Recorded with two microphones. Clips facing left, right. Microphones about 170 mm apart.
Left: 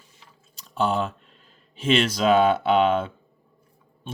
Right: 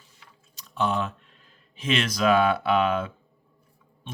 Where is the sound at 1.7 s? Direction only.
30° left (ahead or behind).